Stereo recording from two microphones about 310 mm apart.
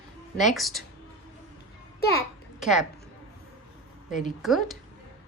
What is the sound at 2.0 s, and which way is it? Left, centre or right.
Speech, left.